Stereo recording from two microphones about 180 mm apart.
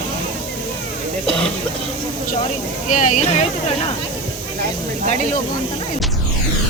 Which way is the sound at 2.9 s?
45° left (ahead or behind).